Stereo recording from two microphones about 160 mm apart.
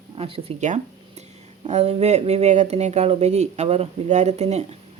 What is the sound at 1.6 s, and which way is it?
Speech, 40° right (ahead or behind).